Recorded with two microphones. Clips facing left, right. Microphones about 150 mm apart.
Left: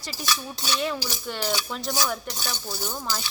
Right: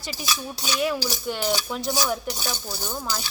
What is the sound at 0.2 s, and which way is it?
Cutlery, 5° right (ahead or behind).